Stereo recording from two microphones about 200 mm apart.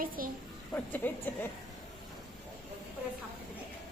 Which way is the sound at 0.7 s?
10° left (ahead or behind).